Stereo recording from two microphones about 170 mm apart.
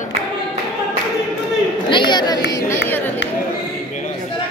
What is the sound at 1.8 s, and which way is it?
Chatter, 25° left (ahead or behind).